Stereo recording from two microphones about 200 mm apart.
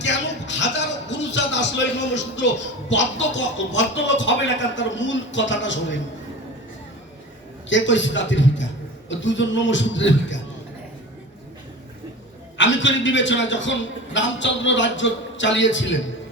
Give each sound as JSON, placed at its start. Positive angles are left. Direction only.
{"t": 0.0, "sound": "music", "side_deg": 65}
{"t": 2.9, "sound": "a man's voice", "side_deg": 65}
{"t": 7.7, "sound": "a man's voice", "side_deg": 65}
{"t": 12.5, "sound": "a man's voice", "side_deg": 65}